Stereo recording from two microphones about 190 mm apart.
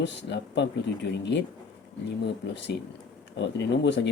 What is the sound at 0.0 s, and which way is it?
Speech, 65° left (ahead or behind).